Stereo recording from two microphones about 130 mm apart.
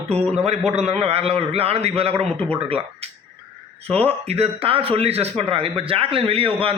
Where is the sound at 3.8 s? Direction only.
50° right (ahead or behind).